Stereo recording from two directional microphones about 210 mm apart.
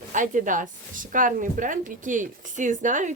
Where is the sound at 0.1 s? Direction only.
35° right (ahead or behind).